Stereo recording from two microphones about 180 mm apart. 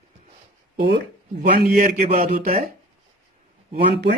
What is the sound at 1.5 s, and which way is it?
Speech, 45° right (ahead or behind).